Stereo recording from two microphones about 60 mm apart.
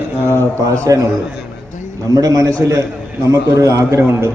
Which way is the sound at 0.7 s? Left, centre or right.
Right.